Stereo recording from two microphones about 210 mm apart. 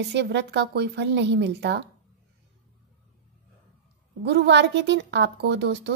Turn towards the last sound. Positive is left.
turn(degrees=-55)  # may be behind; listen again after turning